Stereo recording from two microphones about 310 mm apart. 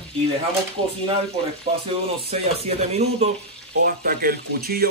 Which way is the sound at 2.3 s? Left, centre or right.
Centre.